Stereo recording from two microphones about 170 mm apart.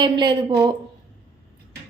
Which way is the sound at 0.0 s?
25° right (ahead or behind).